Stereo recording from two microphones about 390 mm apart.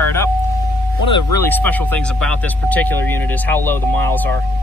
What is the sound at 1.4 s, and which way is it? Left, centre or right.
Speech, centre.